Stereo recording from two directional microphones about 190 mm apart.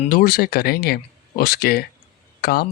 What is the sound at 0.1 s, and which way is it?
Speech, 50° left (ahead or behind).